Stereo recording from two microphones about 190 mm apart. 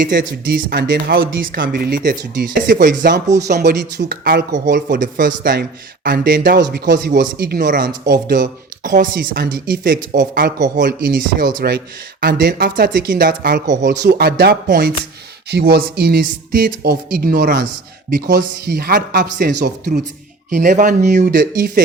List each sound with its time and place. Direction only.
0.2 s speech: 55° right (ahead or behind)
3.6 s speech: 60° right (ahead or behind)
4.5 s speech: 45° right (ahead or behind)
6.7 s speech: 60° right (ahead or behind)
7.1 s speech: 50° right (ahead or behind)
8.3 s speech: 45° right (ahead or behind)
14.0 s speech: 55° right (ahead or behind)